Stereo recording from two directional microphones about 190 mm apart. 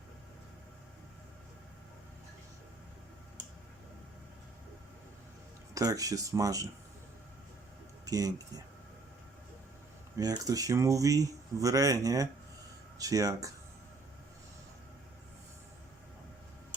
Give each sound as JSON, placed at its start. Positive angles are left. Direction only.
{"t": 5.7, "sound": "speech", "side_deg": -20}
{"t": 8.0, "sound": "speech", "side_deg": -20}
{"t": 10.2, "sound": "speech", "side_deg": -20}